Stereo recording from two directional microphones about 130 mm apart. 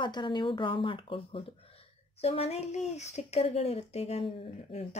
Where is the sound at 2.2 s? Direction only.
55° left (ahead or behind).